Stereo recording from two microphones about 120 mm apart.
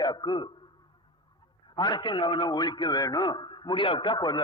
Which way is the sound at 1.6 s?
40° left (ahead or behind).